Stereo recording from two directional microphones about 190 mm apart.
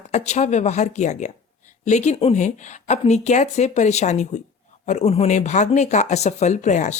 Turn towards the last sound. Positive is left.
turn(degrees=40)  # may be behind; listen again after turning